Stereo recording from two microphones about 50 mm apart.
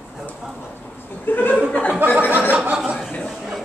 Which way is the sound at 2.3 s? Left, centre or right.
Right.